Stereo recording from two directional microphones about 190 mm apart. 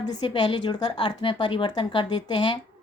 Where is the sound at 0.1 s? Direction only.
25° left (ahead or behind).